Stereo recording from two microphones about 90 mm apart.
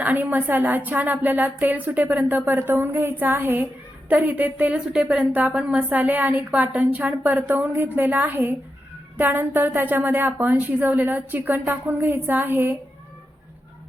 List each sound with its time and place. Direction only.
0.0 s a woman's voice: 20° right (ahead or behind)